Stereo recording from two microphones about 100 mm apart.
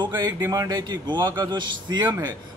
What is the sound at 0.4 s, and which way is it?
Speech, 35° right (ahead or behind).